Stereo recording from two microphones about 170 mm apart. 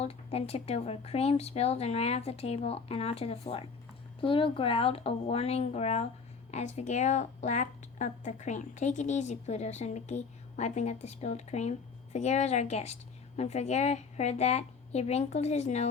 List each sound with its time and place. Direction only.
0.0 s a woman's voice: 35° left (ahead or behind)